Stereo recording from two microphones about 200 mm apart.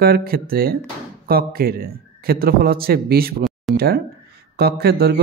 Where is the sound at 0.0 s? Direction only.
50° right (ahead or behind).